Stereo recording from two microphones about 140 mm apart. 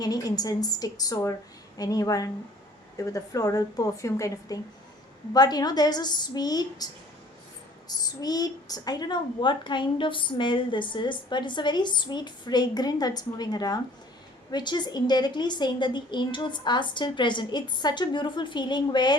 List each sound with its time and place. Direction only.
0.0 s a woman's voice: 25° left (ahead or behind)
7.9 s a woman's voice: 30° left (ahead or behind)